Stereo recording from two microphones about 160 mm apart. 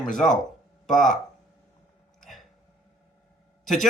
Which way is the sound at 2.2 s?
Centre (ahead or behind).